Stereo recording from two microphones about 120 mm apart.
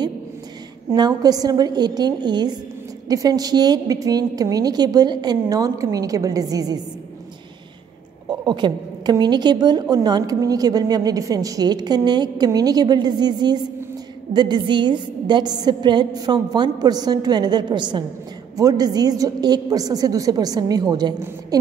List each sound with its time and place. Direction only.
0.9 s a woman's voice: 35° right (ahead or behind)
8.3 s a sound: 40° right (ahead or behind)
9.1 s a woman's voice: 35° right (ahead or behind)